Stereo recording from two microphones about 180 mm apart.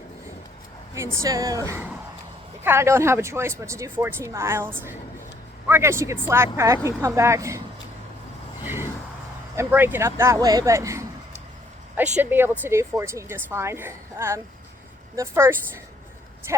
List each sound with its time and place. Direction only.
0.9 s speech: 15° right (ahead or behind)
8.6 s vehicle: 15° right (ahead or behind)
9.6 s speech: 10° right (ahead or behind)
12.1 s speech: 10° right (ahead or behind)